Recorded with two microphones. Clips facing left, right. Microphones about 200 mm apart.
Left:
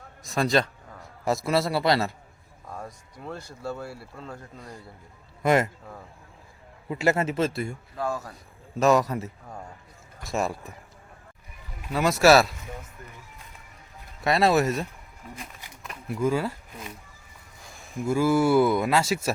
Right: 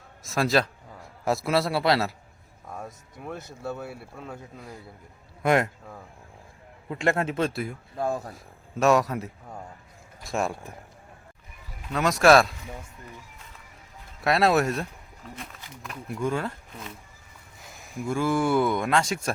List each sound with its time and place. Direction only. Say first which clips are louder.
0.2 s a man's voice: even; centre (ahead or behind)
3.6 s speech: even; 5° right (ahead or behind)
7.9 s speech: right 2 dB; 20° right (ahead or behind)
8.3 s speech: even; centre (ahead or behind)
11.9 s speech: even; 5° left (ahead or behind)
14.2 s speech: even; centre (ahead or behind)
17.9 s speech: left 3 dB; 5° left (ahead or behind)